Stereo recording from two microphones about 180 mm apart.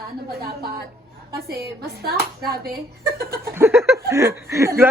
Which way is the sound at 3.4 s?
15° right (ahead or behind).